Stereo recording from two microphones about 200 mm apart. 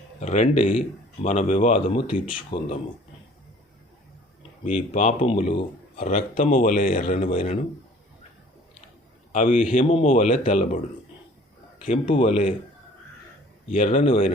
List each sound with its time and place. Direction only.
0.2 s speech: 35° left (ahead or behind)
2.5 s speech: 20° left (ahead or behind)
4.6 s speech: 35° left (ahead or behind)
9.3 s speech: 40° left (ahead or behind)
11.9 s speech: 30° left (ahead or behind)
13.7 s speech: 40° left (ahead or behind)